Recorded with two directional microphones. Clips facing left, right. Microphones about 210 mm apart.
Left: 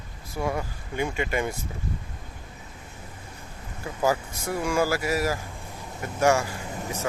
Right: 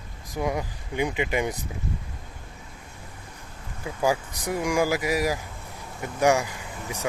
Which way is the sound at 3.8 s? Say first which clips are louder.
Even; 15° right (ahead or behind).